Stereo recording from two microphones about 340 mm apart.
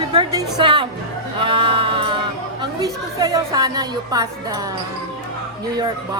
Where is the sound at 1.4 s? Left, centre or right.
Centre.